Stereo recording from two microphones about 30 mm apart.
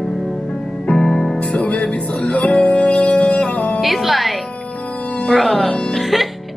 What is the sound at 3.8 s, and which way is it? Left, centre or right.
Music, centre.